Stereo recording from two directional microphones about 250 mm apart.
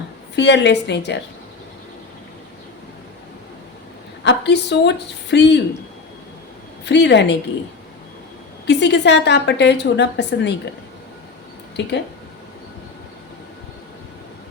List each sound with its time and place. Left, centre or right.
0.3 s a woman's voice: left
4.2 s a woman's voice: left
6.8 s a woman's voice: left
8.6 s a woman's voice: left